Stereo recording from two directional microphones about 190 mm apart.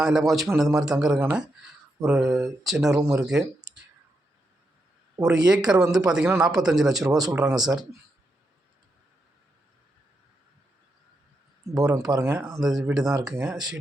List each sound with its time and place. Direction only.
0.0 s speech: centre (ahead or behind)
2.0 s speech: 15° right (ahead or behind)
2.3 s speech: centre (ahead or behind)
5.2 s speech: 20° right (ahead or behind)
5.7 s speech: 5° right (ahead or behind)
6.8 s speech: 20° right (ahead or behind)
7.3 s speech: 5° right (ahead or behind)
7.6 s speech: 20° right (ahead or behind)
11.6 s speech: 20° right (ahead or behind)
12.5 s speech: centre (ahead or behind)